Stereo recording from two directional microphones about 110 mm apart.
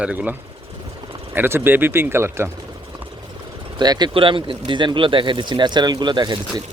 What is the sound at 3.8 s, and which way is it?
Speech, 40° right (ahead or behind).